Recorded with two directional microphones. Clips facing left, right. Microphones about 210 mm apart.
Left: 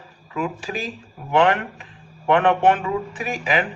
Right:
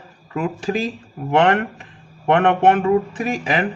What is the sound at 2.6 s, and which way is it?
Speech, 45° right (ahead or behind).